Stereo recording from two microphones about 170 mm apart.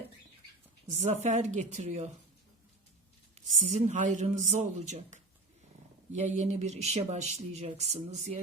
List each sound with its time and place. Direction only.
0.9 s speech: 45° right (ahead or behind)
3.7 s speech: 45° right (ahead or behind)